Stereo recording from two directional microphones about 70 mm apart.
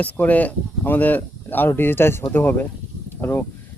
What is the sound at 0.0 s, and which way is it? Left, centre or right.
Speech, left.